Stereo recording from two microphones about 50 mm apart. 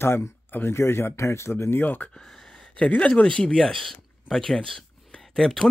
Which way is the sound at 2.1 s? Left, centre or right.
Centre.